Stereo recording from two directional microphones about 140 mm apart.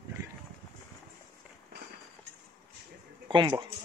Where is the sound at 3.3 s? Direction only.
35° right (ahead or behind).